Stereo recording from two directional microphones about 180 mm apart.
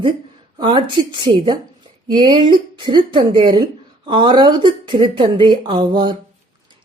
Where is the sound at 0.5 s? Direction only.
25° right (ahead or behind).